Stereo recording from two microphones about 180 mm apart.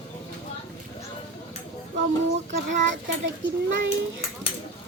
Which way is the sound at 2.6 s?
90° right.